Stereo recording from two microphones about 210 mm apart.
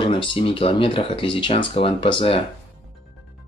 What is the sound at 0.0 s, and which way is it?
Speech, 25° left (ahead or behind).